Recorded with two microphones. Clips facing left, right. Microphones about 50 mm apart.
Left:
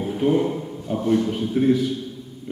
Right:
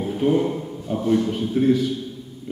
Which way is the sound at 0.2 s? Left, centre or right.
Centre.